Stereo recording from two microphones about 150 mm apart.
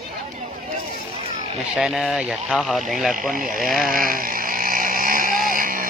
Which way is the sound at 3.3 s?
70° right (ahead or behind).